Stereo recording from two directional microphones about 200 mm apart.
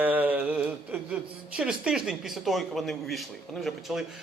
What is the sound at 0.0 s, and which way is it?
A man's voice, 10° right (ahead or behind).